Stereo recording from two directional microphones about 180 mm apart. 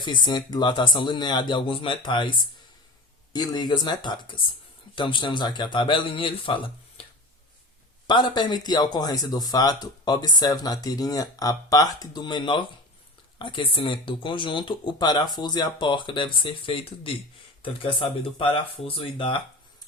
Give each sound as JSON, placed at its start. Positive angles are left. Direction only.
{"t": 0.0, "sound": "speech", "side_deg": 25}
{"t": 3.3, "sound": "speech", "side_deg": 25}
{"t": 8.0, "sound": "speech", "side_deg": 25}